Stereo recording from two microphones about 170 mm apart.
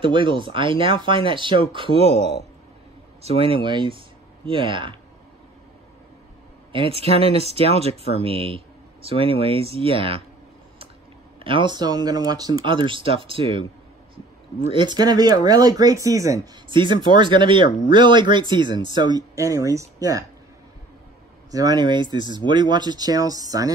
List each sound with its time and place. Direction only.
0.0 s speech: 30° right (ahead or behind)
6.7 s speech: 35° right (ahead or behind)
11.4 s speech: 30° right (ahead or behind)
14.7 s speech: 25° right (ahead or behind)
21.5 s speech: 20° right (ahead or behind)